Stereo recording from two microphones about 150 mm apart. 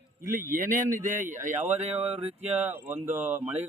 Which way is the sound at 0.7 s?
55° right (ahead or behind).